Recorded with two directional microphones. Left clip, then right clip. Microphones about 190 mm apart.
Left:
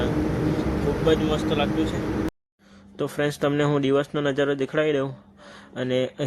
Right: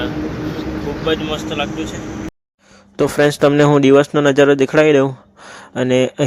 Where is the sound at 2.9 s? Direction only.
50° right (ahead or behind).